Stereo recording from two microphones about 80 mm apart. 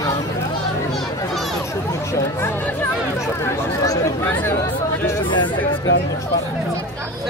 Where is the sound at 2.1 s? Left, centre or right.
Left.